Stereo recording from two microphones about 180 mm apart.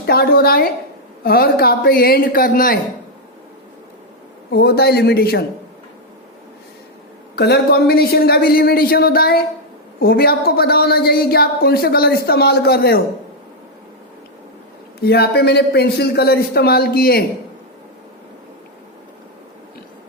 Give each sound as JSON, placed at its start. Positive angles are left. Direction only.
{"t": 0.0, "sound": "speech", "side_deg": 60}
{"t": 4.5, "sound": "speech", "side_deg": 60}
{"t": 7.3, "sound": "speech", "side_deg": 65}
{"t": 15.0, "sound": "speech", "side_deg": 60}